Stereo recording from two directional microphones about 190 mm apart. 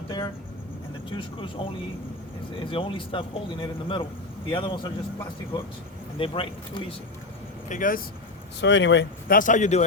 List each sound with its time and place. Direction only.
1.1 s a man's voice: 25° left (ahead or behind)
7.7 s speech: 45° left (ahead or behind)
8.6 s speech: 70° left (ahead or behind)
9.3 s speech: 40° left (ahead or behind)